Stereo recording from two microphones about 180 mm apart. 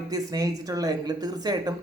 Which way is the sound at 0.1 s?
20° right (ahead or behind).